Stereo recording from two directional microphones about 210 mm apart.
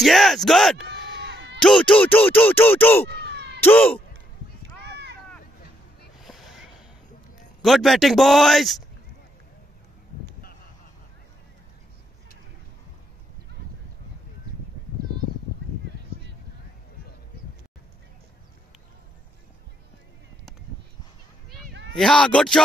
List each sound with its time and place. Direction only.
0.0 s speech: centre (ahead or behind)
0.8 s a sound: 50° right (ahead or behind)
1.6 s speech: centre (ahead or behind)
3.3 s cat: 50° right (ahead or behind)
3.6 s speech: 10° left (ahead or behind)
6.2 s a sound: centre (ahead or behind)
7.6 s speech: centre (ahead or behind)
21.6 s a sound: 55° right (ahead or behind)
21.9 s speech: 5° left (ahead or behind)